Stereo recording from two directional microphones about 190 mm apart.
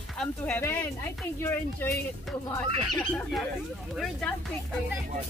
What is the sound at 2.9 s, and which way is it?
Speech, centre (ahead or behind).